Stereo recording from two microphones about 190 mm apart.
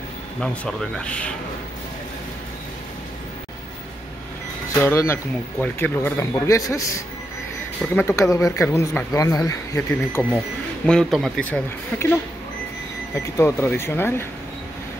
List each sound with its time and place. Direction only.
0.4 s speech: 5° left (ahead or behind)
4.7 s speech: 15° left (ahead or behind)
7.8 s speech: 5° left (ahead or behind)